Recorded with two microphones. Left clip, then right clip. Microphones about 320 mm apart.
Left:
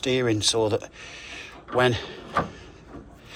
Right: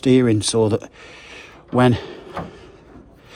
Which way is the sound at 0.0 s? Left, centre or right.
Right.